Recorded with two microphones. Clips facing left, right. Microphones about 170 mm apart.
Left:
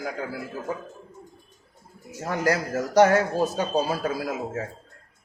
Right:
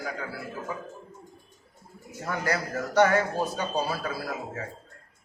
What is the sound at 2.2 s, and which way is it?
A man's voice, 40° left (ahead or behind).